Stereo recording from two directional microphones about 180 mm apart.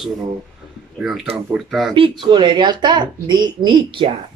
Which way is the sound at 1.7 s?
Centre (ahead or behind).